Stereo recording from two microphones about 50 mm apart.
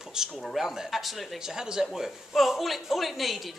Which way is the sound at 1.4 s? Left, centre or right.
Centre.